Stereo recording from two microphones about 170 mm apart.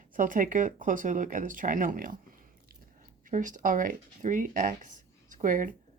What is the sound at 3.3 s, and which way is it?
Speech, 50° right (ahead or behind).